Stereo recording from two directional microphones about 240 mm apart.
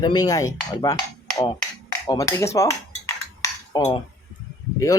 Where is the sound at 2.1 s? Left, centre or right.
Centre.